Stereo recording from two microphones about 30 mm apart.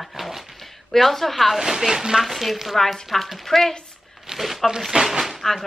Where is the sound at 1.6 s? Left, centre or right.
Centre.